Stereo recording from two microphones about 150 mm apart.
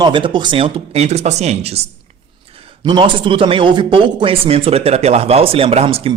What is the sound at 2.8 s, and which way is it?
Speech, 35° right (ahead or behind).